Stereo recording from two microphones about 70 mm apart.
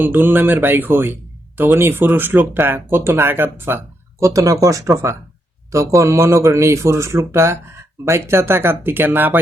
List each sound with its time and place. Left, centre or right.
0.0 s speech: right
4.2 s speech: right